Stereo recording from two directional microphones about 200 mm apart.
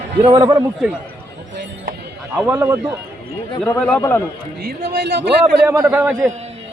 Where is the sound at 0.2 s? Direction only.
25° right (ahead or behind).